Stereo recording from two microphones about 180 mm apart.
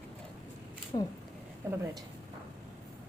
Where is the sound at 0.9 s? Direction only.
30° left (ahead or behind).